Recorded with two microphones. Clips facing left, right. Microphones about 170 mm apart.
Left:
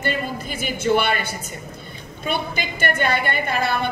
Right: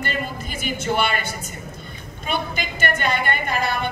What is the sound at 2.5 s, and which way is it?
A woman's voice, 50° right (ahead or behind).